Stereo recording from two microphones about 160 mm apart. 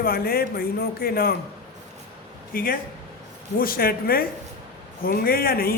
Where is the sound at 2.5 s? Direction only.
65° left (ahead or behind).